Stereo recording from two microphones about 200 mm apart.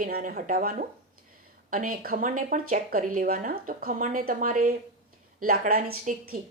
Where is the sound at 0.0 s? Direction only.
40° right (ahead or behind).